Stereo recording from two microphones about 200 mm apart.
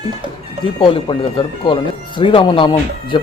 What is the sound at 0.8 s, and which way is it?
Speech, 25° left (ahead or behind).